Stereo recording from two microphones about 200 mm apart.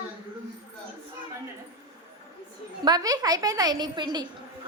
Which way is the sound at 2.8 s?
20° right (ahead or behind).